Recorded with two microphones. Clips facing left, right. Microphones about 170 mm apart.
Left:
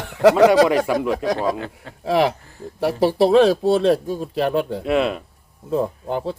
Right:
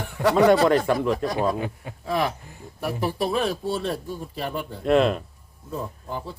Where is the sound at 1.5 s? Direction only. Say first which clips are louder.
Right 1 dB; 15° right (ahead or behind).